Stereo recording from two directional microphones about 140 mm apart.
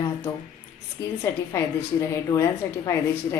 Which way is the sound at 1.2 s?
20° left (ahead or behind).